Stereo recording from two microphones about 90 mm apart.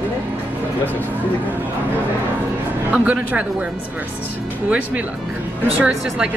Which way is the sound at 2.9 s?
15° right (ahead or behind).